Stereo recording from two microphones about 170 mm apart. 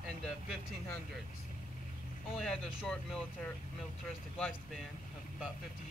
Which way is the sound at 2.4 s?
5° left (ahead or behind).